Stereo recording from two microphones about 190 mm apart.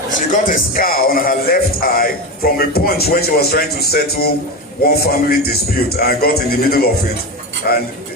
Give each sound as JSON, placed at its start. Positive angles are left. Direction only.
{"t": 0.3, "sound": "speech", "side_deg": 45}